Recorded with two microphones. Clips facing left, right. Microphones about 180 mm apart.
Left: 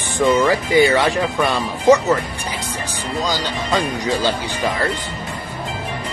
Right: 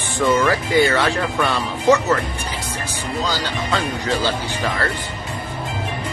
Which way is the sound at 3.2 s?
15° left (ahead or behind).